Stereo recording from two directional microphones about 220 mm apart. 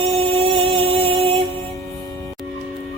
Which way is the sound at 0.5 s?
25° right (ahead or behind).